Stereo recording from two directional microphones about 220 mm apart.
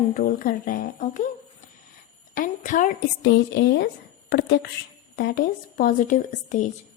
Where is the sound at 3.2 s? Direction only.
50° left (ahead or behind).